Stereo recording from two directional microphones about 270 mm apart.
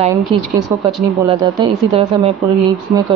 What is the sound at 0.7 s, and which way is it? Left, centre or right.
A woman's voice, centre.